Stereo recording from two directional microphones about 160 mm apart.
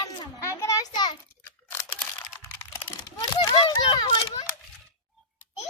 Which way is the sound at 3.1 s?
25° left (ahead or behind).